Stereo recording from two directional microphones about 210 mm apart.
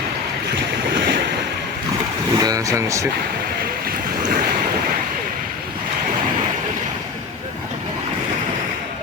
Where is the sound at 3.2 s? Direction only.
45° right (ahead or behind).